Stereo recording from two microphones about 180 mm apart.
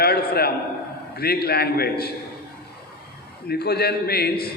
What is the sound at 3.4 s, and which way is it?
A man's voice, 60° left (ahead or behind).